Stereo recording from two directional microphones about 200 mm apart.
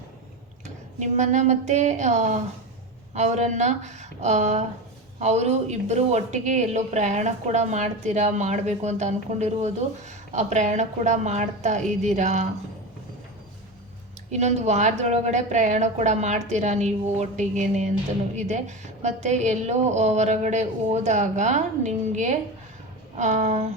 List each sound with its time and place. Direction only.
0.9 s a woman's voice: 35° right (ahead or behind)
14.3 s a woman's voice: 35° right (ahead or behind)